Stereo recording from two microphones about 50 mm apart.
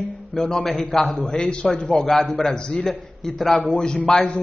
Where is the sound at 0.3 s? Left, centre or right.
Centre.